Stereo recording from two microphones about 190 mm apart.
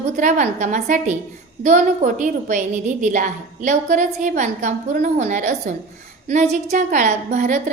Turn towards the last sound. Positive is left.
turn(degrees=-40)  # may be behind; listen again after turning